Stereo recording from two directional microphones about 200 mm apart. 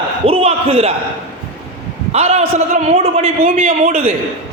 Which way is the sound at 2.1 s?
30° right (ahead or behind).